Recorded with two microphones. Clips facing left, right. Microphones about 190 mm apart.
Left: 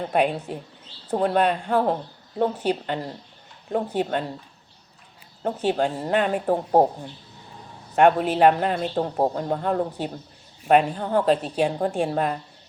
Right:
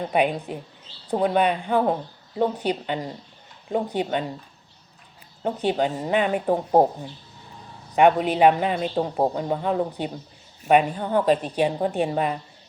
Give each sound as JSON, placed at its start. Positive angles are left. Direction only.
{"t": 0.0, "sound": "a man's voice", "side_deg": -5}
{"t": 0.3, "sound": "speech", "side_deg": 5}
{"t": 1.1, "sound": "a man's voice", "side_deg": -5}
{"t": 5.5, "sound": "a man's voice", "side_deg": 0}